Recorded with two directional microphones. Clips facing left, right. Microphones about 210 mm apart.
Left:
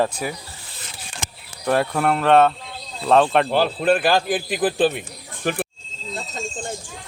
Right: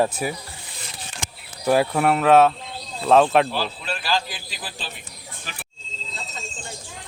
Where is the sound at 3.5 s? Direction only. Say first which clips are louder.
Left 10 dB; 55° left (ahead or behind).